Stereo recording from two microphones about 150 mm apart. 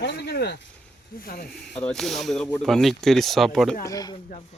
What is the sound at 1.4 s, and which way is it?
Speech, 5° left (ahead or behind).